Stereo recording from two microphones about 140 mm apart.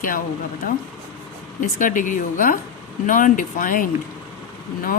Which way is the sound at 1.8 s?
70° left (ahead or behind).